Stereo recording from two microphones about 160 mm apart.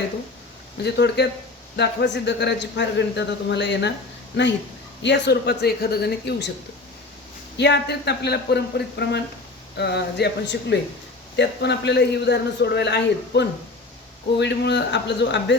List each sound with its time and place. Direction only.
0.8 s a man's voice: 90° left
5.0 s a man's voice: 90° left
7.5 s a man's voice: 90° left